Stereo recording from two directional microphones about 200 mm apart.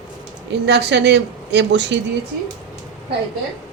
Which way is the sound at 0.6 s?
55° right (ahead or behind).